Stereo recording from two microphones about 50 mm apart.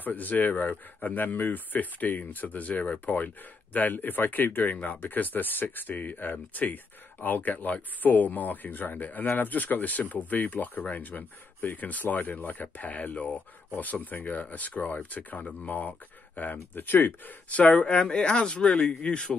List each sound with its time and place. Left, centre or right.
0.0 s speech: left
17.5 s speech: left